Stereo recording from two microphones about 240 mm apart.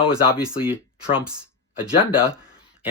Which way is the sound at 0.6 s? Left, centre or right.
Left.